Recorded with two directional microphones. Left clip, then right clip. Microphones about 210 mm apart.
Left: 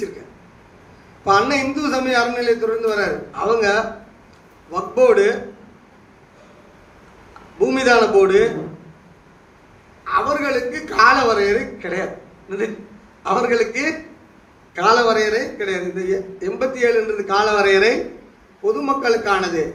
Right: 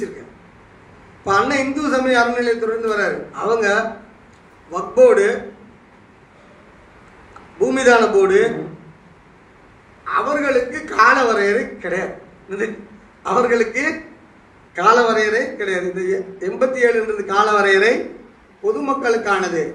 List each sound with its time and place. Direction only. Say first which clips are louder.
1.2 s a man's voice: left 1 dB; 5° right (ahead or behind)
7.6 s a man's voice: right 1 dB; 5° right (ahead or behind)
10.1 s a man's voice: right 1 dB; 5° right (ahead or behind)
13.2 s a man's voice: right 1 dB; 5° right (ahead or behind)